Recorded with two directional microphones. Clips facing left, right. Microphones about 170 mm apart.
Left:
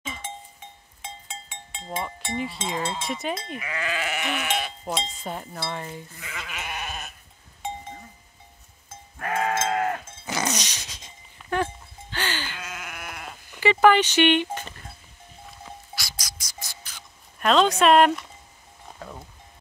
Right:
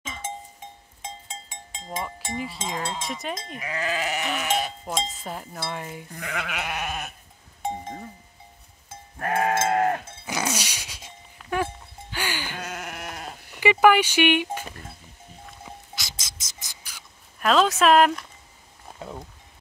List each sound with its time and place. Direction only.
1.0 s a sound: 40° right (ahead or behind)
2.3 s cowbell: centre (ahead or behind)
3.5 s sheep: 35° right (ahead or behind)
4.8 s cowbell: centre (ahead or behind)
6.1 s sheep: 60° right (ahead or behind)
7.6 s doorbell: 40° right (ahead or behind)
9.2 s sheep: 35° right (ahead or behind)
10.2 s a sound: 10° right (ahead or behind)
11.5 s music: 10° right (ahead or behind)
12.6 s carnatic music: 45° right (ahead or behind)
13.5 s speech: 10° right (ahead or behind)
15.6 s music: 20° right (ahead or behind); by 18.2 s centre (ahead or behind)
18.9 s music: 15° right (ahead or behind)